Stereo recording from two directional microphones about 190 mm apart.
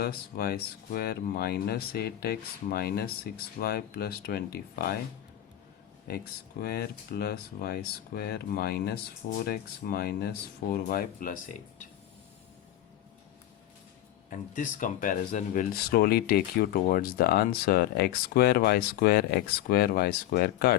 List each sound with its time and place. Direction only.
0.0 s speech: 55° left (ahead or behind)
6.1 s speech: 55° left (ahead or behind)
14.3 s speech: 40° left (ahead or behind)